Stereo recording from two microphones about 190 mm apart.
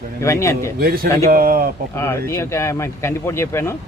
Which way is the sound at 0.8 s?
50° right (ahead or behind).